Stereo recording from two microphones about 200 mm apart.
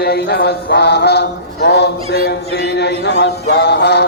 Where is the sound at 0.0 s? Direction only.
50° left (ahead or behind).